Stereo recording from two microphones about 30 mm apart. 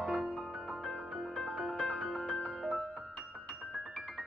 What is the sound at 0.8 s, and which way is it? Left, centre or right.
Music, centre.